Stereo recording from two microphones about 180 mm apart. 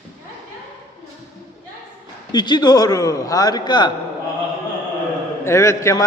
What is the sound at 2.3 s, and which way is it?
A man's voice, 25° left (ahead or behind).